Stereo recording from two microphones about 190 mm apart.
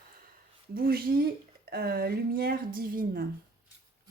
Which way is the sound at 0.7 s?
50° right (ahead or behind).